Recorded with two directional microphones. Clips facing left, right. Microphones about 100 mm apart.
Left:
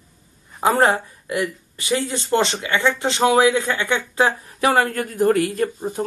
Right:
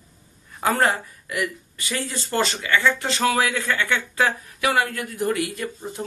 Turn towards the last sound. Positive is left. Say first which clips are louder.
# left 8 dB
turn(degrees=45)  # may be behind; listen again after turning